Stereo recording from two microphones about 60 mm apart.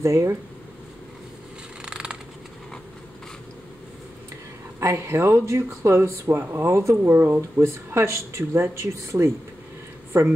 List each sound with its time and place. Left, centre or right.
0.0 s speech: right
1.9 s a sound: centre
4.7 s speech: right
7.2 s speech: right
7.6 s speech: right